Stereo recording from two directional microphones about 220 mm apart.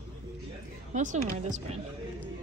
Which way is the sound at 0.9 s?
35° right (ahead or behind).